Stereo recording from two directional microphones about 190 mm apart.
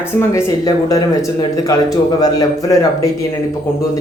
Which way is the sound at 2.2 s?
20° left (ahead or behind).